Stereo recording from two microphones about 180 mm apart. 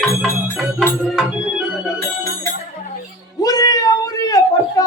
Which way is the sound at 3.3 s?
20° left (ahead or behind).